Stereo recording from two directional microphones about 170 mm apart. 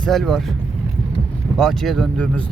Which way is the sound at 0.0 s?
Centre (ahead or behind).